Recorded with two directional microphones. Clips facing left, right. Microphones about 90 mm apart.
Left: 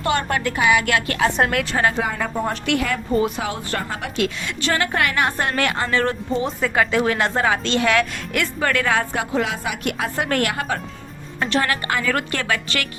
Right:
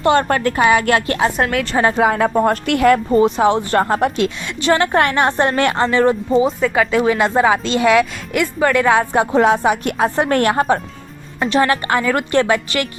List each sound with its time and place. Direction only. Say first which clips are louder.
0.0 s speech: right 7 dB; 35° right (ahead or behind)
1.4 s a woman's voice: right 2 dB; centre (ahead or behind)
2.0 s a woman's voice: right 9 dB; 60° right (ahead or behind)
2.5 s a woman's voice: right 9 dB; 50° right (ahead or behind)
3.2 s speech: right 9 dB; 30° right (ahead or behind)
3.8 s a woman's voice: right 12 dB; 40° right (ahead or behind)
4.2 s a woman's voice: right 3 dB; 25° right (ahead or behind)
6.4 s speech: right 5 dB; centre (ahead or behind); by 9.2 s 20° right (ahead or behind)
9.3 s speech: right 12 dB; 40° right (ahead or behind)
11.3 s a woman's voice: right 6 dB; 15° right (ahead or behind)
11.7 s a woman's voice: right 5 dB; 30° right (ahead or behind)